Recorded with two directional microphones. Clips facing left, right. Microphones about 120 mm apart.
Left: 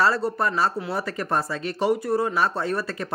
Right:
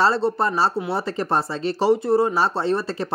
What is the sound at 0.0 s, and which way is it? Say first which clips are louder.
Speech: right 3 dB; 25° right (ahead or behind).